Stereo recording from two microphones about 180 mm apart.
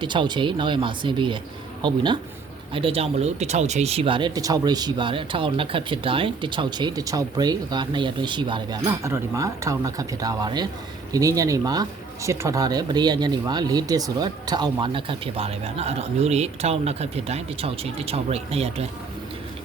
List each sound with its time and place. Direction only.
0.0 s speech: 25° right (ahead or behind)